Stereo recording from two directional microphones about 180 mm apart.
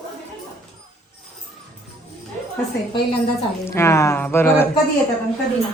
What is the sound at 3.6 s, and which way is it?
Speech, 15° left (ahead or behind).